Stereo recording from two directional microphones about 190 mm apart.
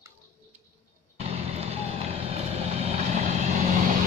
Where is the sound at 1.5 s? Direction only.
30° right (ahead or behind).